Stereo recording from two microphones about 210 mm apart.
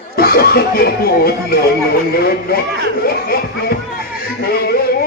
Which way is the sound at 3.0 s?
45° left (ahead or behind).